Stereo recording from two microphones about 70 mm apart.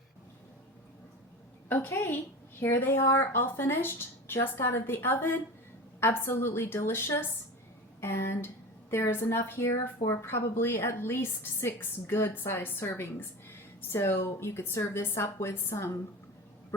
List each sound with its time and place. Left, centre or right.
1.7 s a woman's voice: left